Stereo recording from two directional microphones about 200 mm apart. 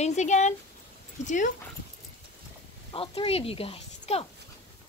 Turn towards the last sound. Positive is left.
turn(degrees=30)  # may be behind; listen again after turning